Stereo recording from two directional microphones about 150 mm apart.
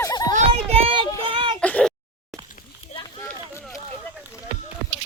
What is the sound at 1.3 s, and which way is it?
Child singing, 35° right (ahead or behind).